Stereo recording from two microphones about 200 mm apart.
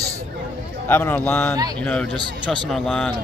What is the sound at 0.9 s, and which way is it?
A man's voice, 10° left (ahead or behind).